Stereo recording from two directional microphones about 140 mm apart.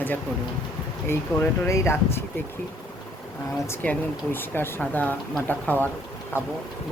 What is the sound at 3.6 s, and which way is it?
Speech, 15° left (ahead or behind).